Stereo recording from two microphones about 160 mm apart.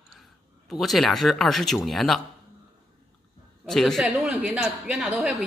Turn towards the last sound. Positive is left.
turn(degrees=-5)  # may be behind; listen again after turning